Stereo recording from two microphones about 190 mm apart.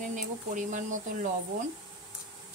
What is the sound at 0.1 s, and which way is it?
Speech, 40° right (ahead or behind).